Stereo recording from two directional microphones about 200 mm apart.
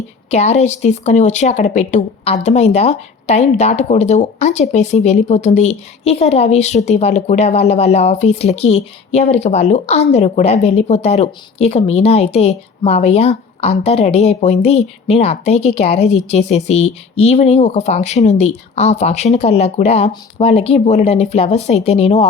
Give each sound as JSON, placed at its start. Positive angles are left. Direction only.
{"t": 0.3, "sound": "a woman's voice", "side_deg": 35}